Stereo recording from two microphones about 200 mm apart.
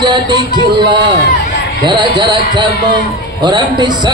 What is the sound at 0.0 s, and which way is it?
Speech, 20° right (ahead or behind).